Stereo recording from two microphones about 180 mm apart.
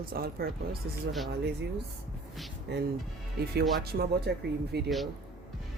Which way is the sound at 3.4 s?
60° right (ahead or behind).